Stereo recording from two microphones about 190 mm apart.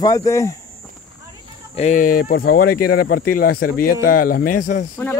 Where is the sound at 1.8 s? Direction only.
40° left (ahead or behind).